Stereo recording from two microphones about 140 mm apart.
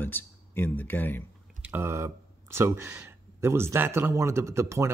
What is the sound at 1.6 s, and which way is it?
Speech, 15° right (ahead or behind).